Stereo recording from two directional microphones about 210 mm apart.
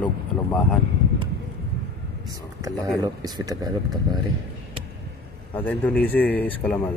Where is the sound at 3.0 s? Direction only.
20° right (ahead or behind).